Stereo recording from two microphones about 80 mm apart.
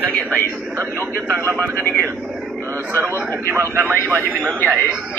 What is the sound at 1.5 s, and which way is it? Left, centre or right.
Speech, right.